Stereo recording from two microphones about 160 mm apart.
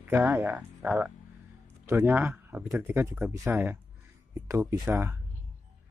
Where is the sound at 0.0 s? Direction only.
15° right (ahead or behind).